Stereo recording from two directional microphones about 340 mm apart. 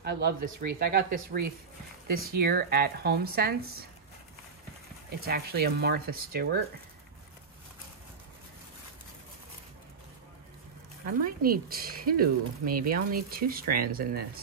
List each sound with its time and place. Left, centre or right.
0.0 s speech: right
5.2 s speech: right
11.2 s speech: right